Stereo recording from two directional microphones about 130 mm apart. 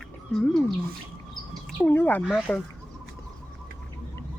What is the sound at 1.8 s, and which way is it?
Speech, 15° left (ahead or behind).